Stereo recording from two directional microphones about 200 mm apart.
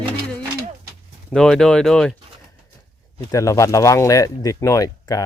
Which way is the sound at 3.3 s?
15° left (ahead or behind).